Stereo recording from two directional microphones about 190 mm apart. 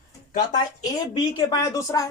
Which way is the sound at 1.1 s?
25° left (ahead or behind).